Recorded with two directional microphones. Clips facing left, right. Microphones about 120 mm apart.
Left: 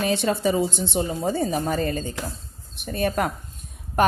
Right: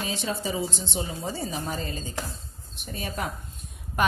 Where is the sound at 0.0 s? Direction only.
65° left (ahead or behind).